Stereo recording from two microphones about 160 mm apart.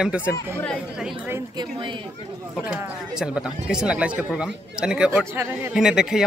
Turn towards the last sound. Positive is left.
turn(degrees=-5)  # may be behind; listen again after turning